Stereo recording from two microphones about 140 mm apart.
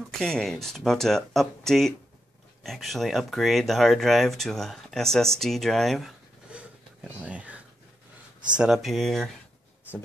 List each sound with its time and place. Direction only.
0.2 s speech: 5° left (ahead or behind)